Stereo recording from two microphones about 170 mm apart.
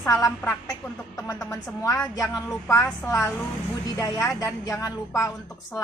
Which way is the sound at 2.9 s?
15° left (ahead or behind).